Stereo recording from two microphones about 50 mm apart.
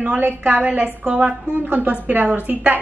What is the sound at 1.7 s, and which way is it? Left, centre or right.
A woman's voice, right.